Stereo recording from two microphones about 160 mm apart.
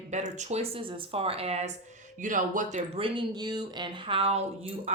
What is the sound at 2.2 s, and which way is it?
Speech, 55° right (ahead or behind).